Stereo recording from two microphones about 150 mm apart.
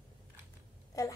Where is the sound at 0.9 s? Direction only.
25° left (ahead or behind).